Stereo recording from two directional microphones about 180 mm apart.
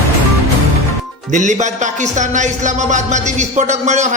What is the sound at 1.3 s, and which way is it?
Speech, 40° right (ahead or behind).